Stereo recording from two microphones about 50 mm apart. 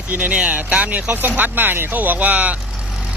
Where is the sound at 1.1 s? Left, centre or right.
Right.